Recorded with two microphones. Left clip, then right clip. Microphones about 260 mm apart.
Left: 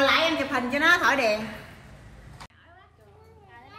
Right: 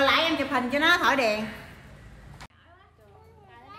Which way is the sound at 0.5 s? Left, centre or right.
Right.